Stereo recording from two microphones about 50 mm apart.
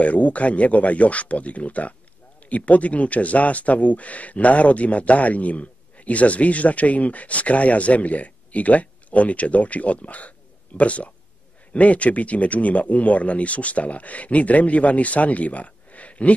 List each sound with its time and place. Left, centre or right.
0.0 s speech: left